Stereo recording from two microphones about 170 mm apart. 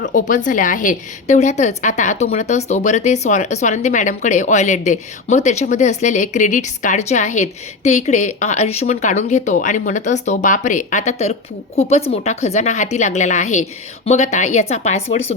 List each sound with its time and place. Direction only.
0.0 s a woman's voice: 50° left (ahead or behind)